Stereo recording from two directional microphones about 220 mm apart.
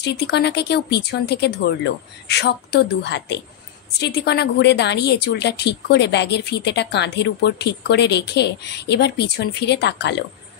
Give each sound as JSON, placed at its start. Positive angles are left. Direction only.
{"t": 0.0, "sound": "a woman's voice", "side_deg": 50}